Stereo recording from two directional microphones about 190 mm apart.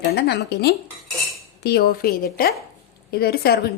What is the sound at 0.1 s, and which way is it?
A woman's voice, 55° left (ahead or behind).